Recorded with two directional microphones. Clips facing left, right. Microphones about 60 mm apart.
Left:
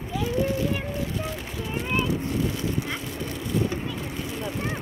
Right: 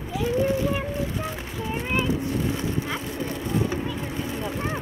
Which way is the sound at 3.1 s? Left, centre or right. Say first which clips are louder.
Right 2 dB; right.